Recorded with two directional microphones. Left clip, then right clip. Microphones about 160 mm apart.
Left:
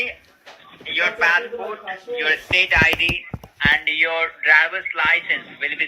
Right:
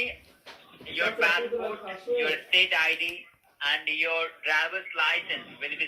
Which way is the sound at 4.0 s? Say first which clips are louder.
Left 8 dB; 30° left (ahead or behind).